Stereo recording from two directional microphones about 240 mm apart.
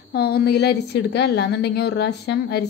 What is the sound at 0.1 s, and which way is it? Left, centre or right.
A woman's voice, left.